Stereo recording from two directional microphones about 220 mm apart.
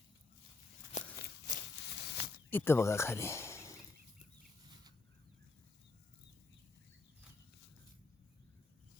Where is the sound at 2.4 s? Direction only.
10° left (ahead or behind).